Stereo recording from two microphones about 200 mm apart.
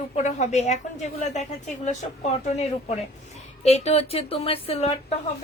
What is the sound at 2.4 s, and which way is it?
Speech, 30° left (ahead or behind).